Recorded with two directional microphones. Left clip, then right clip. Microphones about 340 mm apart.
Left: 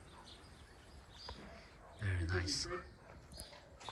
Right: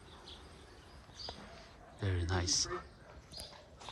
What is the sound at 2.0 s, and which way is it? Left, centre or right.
Speech, centre.